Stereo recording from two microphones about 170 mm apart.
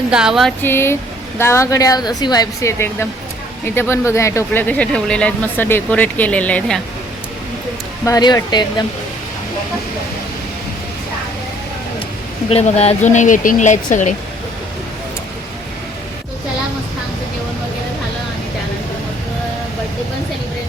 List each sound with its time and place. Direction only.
0.1 s a sound: 5° right (ahead or behind)
0.6 s speech: 15° left (ahead or behind)
8.0 s speech: 20° left (ahead or behind)
12.5 s speech: 35° left (ahead or behind)